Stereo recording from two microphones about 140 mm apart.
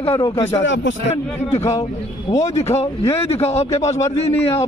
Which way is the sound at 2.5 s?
50° left (ahead or behind).